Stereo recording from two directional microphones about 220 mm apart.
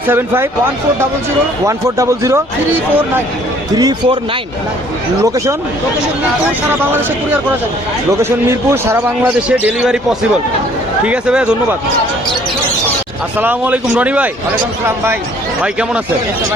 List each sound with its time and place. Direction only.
0.1 s a man's voice: 10° right (ahead or behind)
1.6 s a man's voice: 15° right (ahead or behind)
3.8 s a man's voice: 15° right (ahead or behind)
5.2 s a man's voice: 15° right (ahead or behind)
8.2 s a man's voice: 10° right (ahead or behind)
13.4 s a man's voice: 10° right (ahead or behind)